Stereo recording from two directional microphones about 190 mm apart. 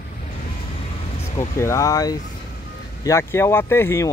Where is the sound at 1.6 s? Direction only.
15° left (ahead or behind).